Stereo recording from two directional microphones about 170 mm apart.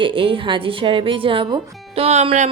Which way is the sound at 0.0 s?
30° right (ahead or behind).